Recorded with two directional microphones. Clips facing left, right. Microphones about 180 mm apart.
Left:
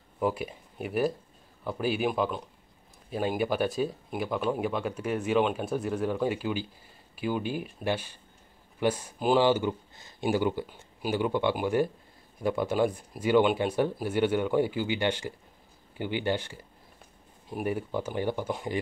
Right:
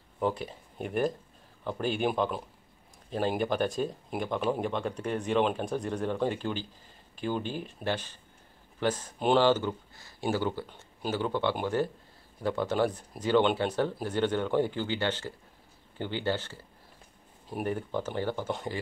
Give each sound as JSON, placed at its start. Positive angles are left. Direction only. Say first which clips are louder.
{"t": 0.2, "sound": "speech", "louder": "left 1 dB", "side_deg": 10}
{"t": 17.6, "sound": "speech", "louder": "left 2 dB", "side_deg": 10}